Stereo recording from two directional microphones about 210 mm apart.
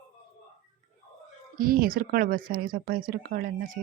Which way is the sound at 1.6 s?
45° right (ahead or behind).